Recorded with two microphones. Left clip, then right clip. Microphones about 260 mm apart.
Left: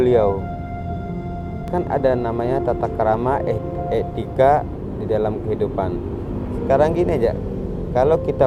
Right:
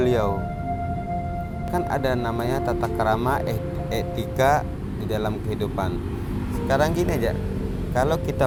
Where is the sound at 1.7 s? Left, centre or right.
Right.